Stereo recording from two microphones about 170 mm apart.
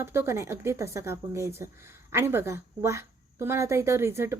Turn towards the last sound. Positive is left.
turn(degrees=-15)  # may be behind; listen again after turning